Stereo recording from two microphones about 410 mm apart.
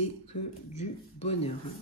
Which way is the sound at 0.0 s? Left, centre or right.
Centre.